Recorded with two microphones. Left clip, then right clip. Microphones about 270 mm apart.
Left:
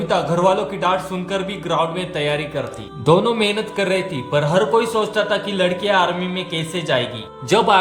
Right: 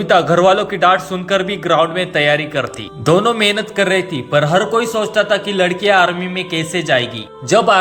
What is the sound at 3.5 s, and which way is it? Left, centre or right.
A man's voice, centre.